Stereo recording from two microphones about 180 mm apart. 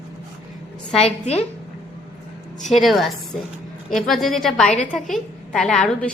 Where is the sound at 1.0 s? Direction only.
35° left (ahead or behind).